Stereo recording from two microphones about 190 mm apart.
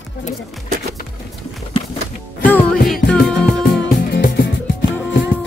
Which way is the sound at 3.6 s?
65° left (ahead or behind).